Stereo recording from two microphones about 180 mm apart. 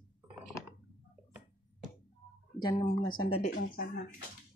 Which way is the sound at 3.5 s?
60° left (ahead or behind).